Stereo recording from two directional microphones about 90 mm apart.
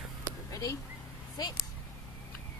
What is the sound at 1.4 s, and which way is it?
Speech, 45° left (ahead or behind).